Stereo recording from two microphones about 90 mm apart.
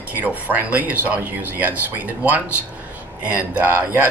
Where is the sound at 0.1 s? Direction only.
20° right (ahead or behind).